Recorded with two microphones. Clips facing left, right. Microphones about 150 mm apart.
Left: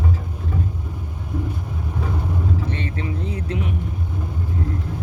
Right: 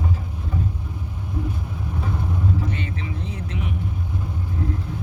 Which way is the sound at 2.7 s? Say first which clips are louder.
Left 2 dB; 35° left (ahead or behind).